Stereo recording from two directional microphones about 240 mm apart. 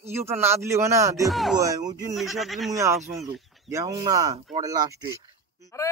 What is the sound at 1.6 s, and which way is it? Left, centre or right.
Speech, centre.